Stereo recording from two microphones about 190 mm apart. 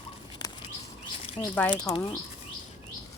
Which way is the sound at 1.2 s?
25° left (ahead or behind).